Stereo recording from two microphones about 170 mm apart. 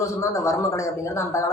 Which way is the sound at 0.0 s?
15° left (ahead or behind).